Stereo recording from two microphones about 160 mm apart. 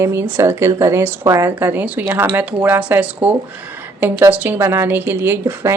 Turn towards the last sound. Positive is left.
turn(degrees=-15)  # may be behind; listen again after turning